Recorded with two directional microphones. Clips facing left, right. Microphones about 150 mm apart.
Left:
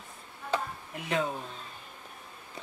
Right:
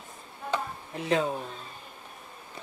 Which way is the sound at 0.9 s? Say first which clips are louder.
Right 5 dB; 30° right (ahead or behind).